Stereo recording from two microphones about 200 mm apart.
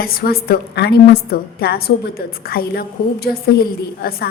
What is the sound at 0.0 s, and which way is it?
A woman's voice, 50° left (ahead or behind).